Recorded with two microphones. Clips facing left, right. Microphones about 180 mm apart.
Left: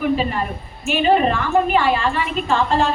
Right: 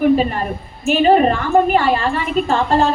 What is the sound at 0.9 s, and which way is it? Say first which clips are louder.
A woman's voice: right 4 dB; 40° right (ahead or behind).